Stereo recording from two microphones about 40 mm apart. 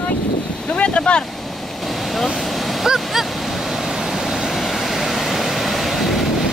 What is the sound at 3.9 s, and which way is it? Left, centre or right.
Vehicle, centre.